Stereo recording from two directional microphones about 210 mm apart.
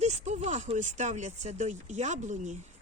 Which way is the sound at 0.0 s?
30° right (ahead or behind).